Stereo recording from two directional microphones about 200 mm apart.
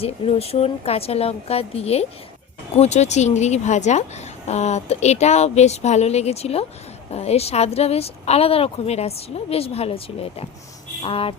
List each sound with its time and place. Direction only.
0.0 s a woman's voice: 30° left (ahead or behind)